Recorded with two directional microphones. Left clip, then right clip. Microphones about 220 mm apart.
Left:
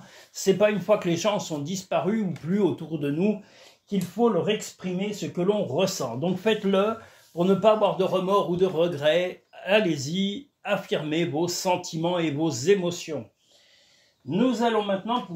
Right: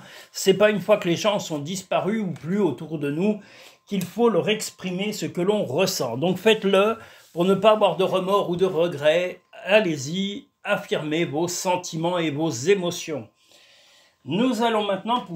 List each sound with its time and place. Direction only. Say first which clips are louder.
0.1 s speech: right 3 dB; 35° right (ahead or behind)
3.9 s speech: right 3 dB; 35° right (ahead or behind)
14.3 s a man's voice: right 2 dB; 45° right (ahead or behind)